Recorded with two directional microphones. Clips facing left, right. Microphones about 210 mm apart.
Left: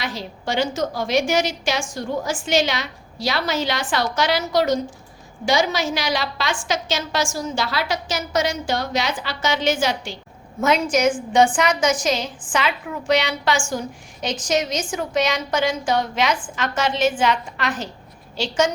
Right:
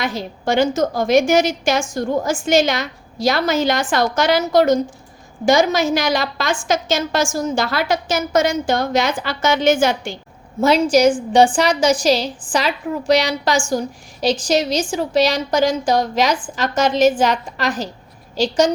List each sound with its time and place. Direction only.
0.0 s a woman's voice: 50° right (ahead or behind)
10.6 s a woman's voice: 35° right (ahead or behind)